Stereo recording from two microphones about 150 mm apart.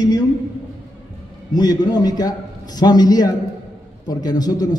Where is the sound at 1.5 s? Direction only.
25° left (ahead or behind).